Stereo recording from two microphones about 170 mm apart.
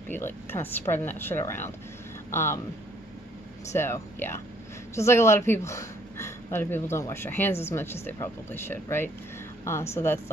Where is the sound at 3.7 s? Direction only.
15° left (ahead or behind).